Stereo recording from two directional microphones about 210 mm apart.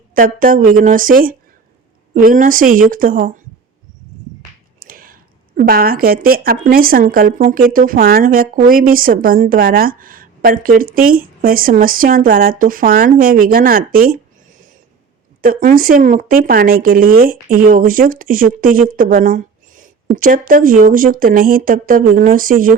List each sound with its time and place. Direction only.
0.1 s speech: 40° right (ahead or behind)
4.8 s speech: 45° right (ahead or behind)